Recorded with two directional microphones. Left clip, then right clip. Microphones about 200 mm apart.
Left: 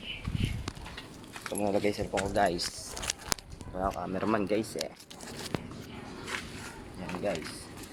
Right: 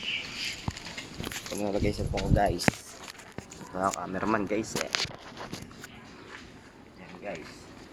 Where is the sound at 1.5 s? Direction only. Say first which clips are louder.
Left 2 dB; 20° left (ahead or behind).